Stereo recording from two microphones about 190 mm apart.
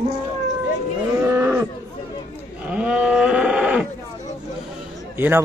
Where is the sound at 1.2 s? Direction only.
10° right (ahead or behind).